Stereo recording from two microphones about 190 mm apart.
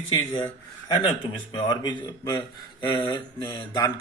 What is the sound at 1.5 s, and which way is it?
A man's voice, 25° left (ahead or behind).